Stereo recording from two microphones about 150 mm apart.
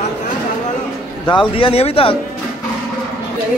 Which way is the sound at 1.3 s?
35° left (ahead or behind).